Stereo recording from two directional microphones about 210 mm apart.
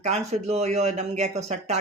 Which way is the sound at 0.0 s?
30° right (ahead or behind).